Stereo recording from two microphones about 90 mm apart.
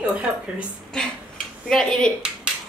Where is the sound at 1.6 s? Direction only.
5° left (ahead or behind).